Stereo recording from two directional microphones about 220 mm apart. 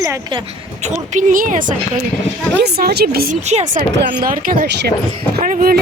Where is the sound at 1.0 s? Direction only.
35° right (ahead or behind).